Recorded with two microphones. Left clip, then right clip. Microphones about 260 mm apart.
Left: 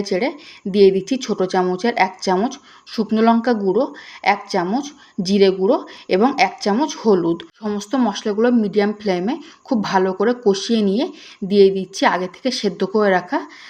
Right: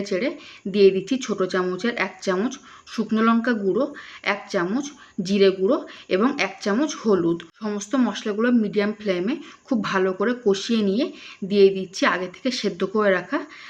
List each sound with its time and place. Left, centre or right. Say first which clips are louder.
0.0 s speech: left 4 dB; centre